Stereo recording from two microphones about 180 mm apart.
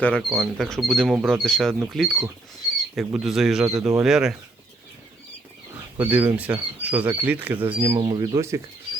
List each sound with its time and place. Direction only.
0.0 s speech: 5° left (ahead or behind)
6.0 s speech: 10° right (ahead or behind)
7.8 s speech: 20° right (ahead or behind)